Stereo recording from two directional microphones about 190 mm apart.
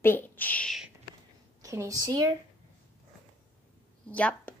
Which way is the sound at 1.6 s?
15° right (ahead or behind).